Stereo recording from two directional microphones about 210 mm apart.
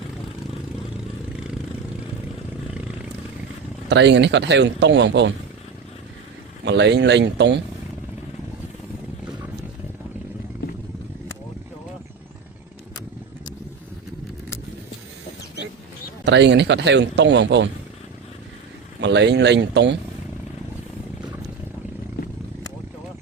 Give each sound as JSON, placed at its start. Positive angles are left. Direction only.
{"t": 3.8, "sound": "a man's voice", "side_deg": -55}
{"t": 6.7, "sound": "a man's voice", "side_deg": -55}
{"t": 16.2, "sound": "a man's voice", "side_deg": -55}
{"t": 18.9, "sound": "a man's voice", "side_deg": -55}